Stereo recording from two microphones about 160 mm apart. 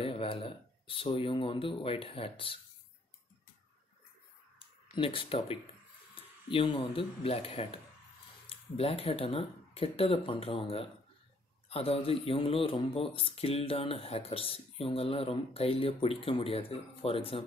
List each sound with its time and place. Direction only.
0.0 s speech: 35° left (ahead or behind)
4.9 s speech: 35° left (ahead or behind)
6.2 s a sound: 35° left (ahead or behind)
6.5 s speech: 35° left (ahead or behind)